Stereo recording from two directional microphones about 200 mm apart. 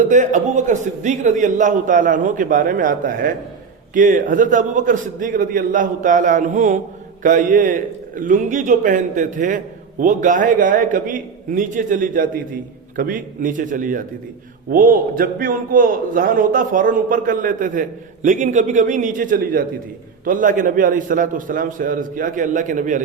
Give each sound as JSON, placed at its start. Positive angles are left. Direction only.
{"t": 0.0, "sound": "a man's voice", "side_deg": -40}